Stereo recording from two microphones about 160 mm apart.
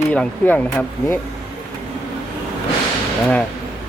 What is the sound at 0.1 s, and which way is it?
Speech, 10° left (ahead or behind).